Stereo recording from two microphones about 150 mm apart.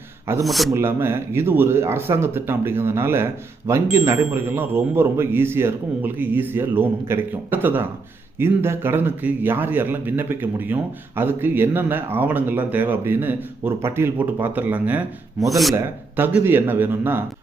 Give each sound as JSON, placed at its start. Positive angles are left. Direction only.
{"t": 0.4, "sound": "speech", "side_deg": 0}
{"t": 0.7, "sound": "a man's voice", "side_deg": -15}
{"t": 15.7, "sound": "a man's voice", "side_deg": -15}